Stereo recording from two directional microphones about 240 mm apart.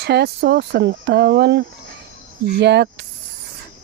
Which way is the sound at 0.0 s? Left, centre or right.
Right.